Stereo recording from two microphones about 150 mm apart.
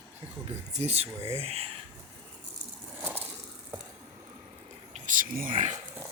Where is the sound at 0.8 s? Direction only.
45° right (ahead or behind).